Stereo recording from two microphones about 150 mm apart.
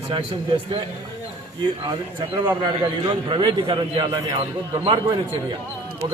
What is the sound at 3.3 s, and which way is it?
Speech, 35° right (ahead or behind).